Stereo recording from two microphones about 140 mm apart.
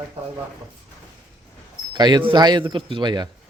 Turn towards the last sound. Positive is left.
turn(degrees=-30)  # may be behind; listen again after turning